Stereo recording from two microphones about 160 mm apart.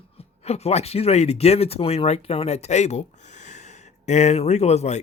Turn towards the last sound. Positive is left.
turn(degrees=45)  # may be behind; listen again after turning